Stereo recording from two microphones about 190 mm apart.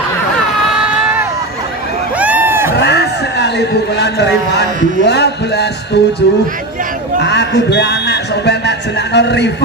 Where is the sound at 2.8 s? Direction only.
60° left (ahead or behind).